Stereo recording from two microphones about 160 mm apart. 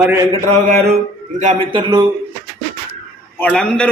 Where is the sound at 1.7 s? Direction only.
30° right (ahead or behind).